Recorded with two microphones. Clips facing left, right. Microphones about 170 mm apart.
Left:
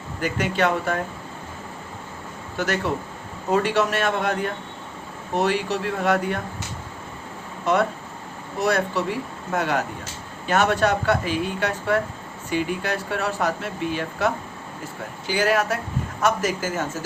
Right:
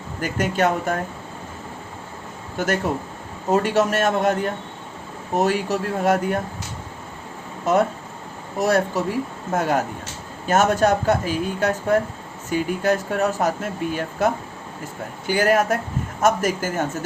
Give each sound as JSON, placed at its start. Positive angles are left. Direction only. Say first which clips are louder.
{"t": 0.3, "sound": "speech", "louder": "right 2 dB", "side_deg": -45}
{"t": 3.5, "sound": "speech", "louder": "right 2 dB", "side_deg": -45}
{"t": 7.6, "sound": "speech", "louder": "right 2 dB", "side_deg": -45}